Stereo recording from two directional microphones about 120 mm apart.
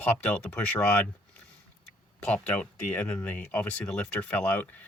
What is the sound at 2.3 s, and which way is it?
Speech, 10° left (ahead or behind).